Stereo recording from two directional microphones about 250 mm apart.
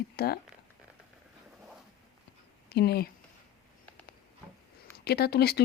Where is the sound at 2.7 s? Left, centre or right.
Left.